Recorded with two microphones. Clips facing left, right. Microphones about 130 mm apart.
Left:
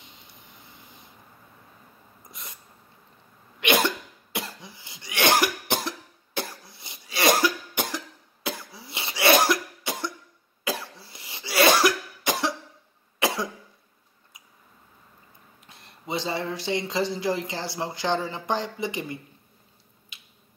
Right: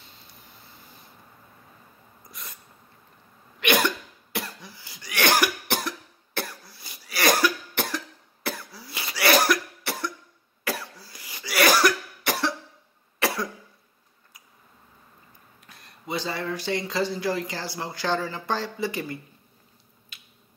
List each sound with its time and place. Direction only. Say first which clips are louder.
0.0 s a sound: even; 20° left (ahead or behind)
2.2 s sneeze: right 1 dB; 25° left (ahead or behind)
3.6 s cough: even; 25° left (ahead or behind)
15.6 s speech: even; 25° left (ahead or behind)
20.1 s finger snapping: even; 20° left (ahead or behind)